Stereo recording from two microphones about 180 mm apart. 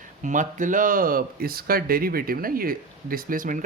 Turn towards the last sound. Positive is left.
turn(degrees=-50)  # may be behind; listen again after turning